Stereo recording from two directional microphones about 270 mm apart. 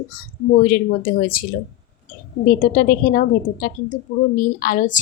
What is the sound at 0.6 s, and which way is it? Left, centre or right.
Speech, left.